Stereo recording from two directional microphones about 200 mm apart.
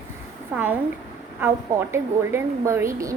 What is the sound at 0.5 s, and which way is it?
A woman's voice, 10° right (ahead or behind).